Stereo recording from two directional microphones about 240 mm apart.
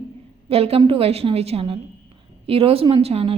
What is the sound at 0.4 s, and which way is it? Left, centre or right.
Speech, right.